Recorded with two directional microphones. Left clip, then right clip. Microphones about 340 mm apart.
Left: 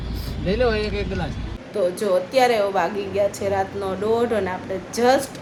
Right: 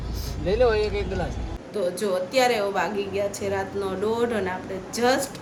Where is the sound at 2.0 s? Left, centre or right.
Centre.